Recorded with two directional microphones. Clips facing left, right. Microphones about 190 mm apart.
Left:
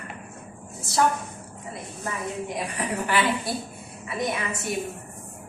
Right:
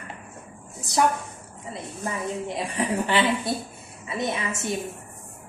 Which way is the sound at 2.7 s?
25° right (ahead or behind).